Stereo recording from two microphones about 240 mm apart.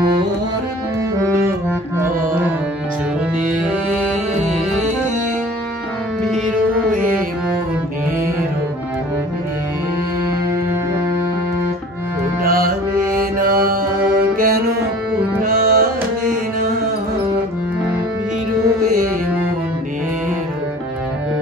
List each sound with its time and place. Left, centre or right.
12.4 s music: right
15.4 s tabla: right
18.8 s music: right